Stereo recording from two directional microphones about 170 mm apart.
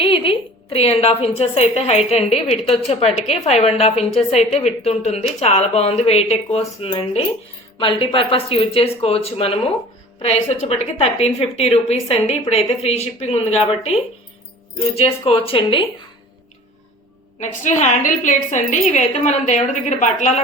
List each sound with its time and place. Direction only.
0.0 s a sound: 35° left (ahead or behind)
1.4 s a woman's voice: 35° left (ahead or behind)
17.4 s a woman's voice: 45° left (ahead or behind)